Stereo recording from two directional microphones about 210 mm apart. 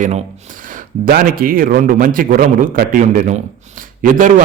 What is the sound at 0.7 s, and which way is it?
A man's voice, 45° right (ahead or behind).